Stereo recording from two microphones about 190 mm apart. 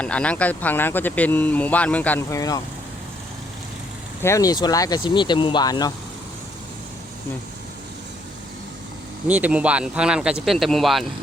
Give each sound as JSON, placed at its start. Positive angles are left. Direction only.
{"t": 0.0, "sound": "speech", "side_deg": 5}
{"t": 4.2, "sound": "speech", "side_deg": 15}
{"t": 9.2, "sound": "speech", "side_deg": -10}